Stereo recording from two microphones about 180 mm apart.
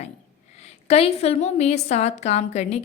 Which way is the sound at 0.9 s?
35° left (ahead or behind).